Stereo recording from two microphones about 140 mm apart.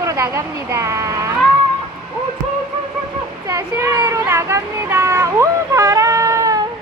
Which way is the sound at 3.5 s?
20° right (ahead or behind).